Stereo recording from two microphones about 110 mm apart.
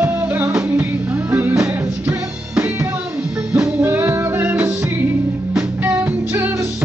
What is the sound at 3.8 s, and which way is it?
Music, 20° right (ahead or behind).